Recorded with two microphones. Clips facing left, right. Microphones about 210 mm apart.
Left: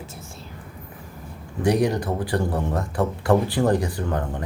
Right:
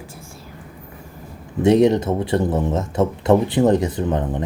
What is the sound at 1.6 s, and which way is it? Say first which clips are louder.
Speech: right 7 dB; 25° right (ahead or behind).